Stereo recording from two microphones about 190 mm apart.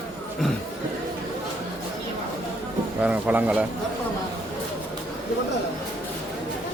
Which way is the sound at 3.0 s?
10° right (ahead or behind).